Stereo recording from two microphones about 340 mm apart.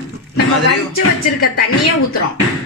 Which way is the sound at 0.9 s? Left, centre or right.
Left.